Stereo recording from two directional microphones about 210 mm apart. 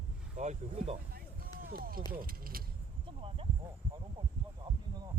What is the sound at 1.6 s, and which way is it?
Speech, 45° right (ahead or behind).